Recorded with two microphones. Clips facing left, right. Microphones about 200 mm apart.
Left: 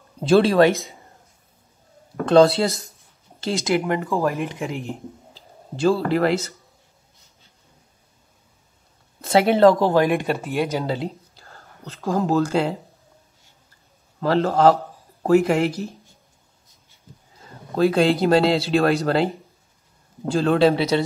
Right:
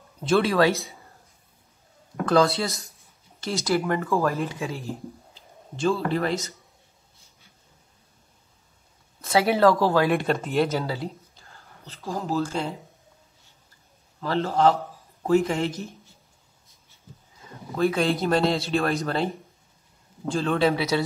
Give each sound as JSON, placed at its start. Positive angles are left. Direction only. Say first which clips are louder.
{"t": 0.2, "sound": "speech", "louder": "left 5 dB", "side_deg": 30}
{"t": 2.2, "sound": "speech", "louder": "left 6 dB", "side_deg": 25}
{"t": 5.3, "sound": "speech", "louder": "left 6 dB", "side_deg": 35}
{"t": 9.2, "sound": "speech", "louder": "left 5 dB", "side_deg": 25}
{"t": 11.4, "sound": "whispering", "louder": "left 10 dB", "side_deg": 45}
{"t": 12.0, "sound": "speech", "louder": "left 7 dB", "side_deg": 90}
{"t": 14.2, "sound": "speech", "louder": "left 5 dB", "side_deg": 40}
{"t": 17.7, "sound": "speech", "louder": "left 5 dB", "side_deg": 30}
{"t": 20.3, "sound": "speech", "louder": "left 6 dB", "side_deg": 35}